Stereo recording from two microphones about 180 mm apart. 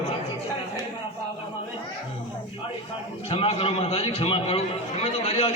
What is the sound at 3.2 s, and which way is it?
A man's voice, 35° left (ahead or behind).